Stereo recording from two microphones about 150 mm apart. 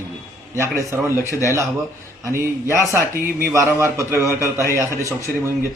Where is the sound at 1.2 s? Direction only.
20° left (ahead or behind).